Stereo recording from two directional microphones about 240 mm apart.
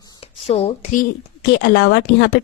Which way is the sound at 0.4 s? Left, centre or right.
Left.